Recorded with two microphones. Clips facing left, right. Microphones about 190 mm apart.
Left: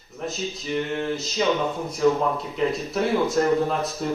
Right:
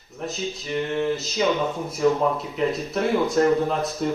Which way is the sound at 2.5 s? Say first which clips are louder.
Even; centre (ahead or behind).